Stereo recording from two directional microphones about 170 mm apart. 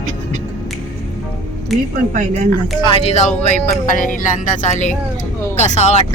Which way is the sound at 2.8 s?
35° left (ahead or behind).